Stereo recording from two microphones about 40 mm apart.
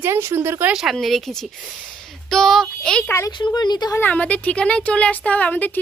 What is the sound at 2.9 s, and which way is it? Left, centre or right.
Speech, centre.